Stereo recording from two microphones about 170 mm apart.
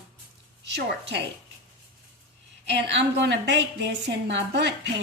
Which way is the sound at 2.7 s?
90° right.